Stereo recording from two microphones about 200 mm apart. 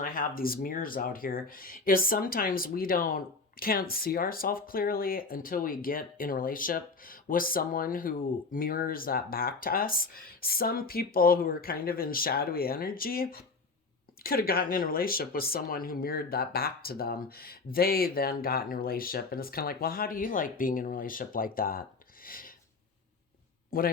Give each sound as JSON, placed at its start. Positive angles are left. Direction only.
{"t": 0.0, "sound": "speech", "side_deg": 45}
{"t": 23.7, "sound": "speech", "side_deg": 45}